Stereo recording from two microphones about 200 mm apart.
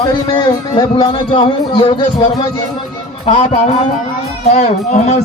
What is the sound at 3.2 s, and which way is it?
A man's voice, 30° left (ahead or behind).